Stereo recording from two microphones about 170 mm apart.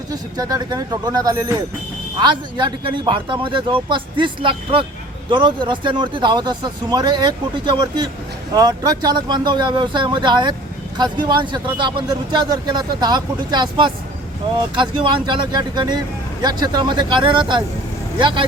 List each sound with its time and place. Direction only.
0.1 s speech: 20° right (ahead or behind)